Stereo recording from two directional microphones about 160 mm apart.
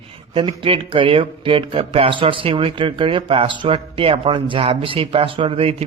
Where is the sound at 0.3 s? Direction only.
35° right (ahead or behind).